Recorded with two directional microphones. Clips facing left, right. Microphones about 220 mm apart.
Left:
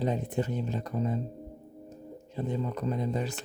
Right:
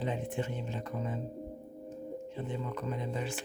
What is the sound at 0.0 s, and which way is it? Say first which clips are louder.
Speech: left 5 dB; 40° left (ahead or behind).